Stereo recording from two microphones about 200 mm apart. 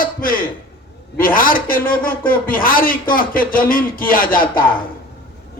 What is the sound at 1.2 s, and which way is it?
Speech, 45° left (ahead or behind).